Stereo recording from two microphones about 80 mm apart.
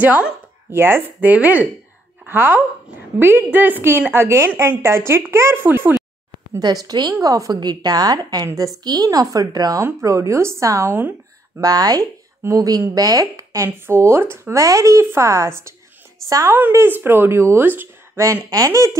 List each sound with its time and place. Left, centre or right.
0.0 s a woman's voice: right
6.6 s a woman's voice: right
9.8 s a woman's voice: right
10.9 s a sound: right
11.6 s speech: right
14.6 s a woman's voice: right
16.4 s speech: right
18.1 s a woman's voice: right